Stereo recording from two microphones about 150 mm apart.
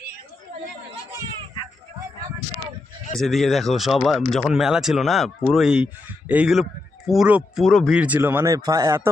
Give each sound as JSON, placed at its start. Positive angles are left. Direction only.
{"t": 3.2, "sound": "speech", "side_deg": 0}
{"t": 7.9, "sound": "a man's voice", "side_deg": -10}